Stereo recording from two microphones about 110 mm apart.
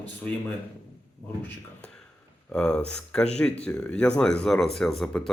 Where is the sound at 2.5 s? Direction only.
10° left (ahead or behind).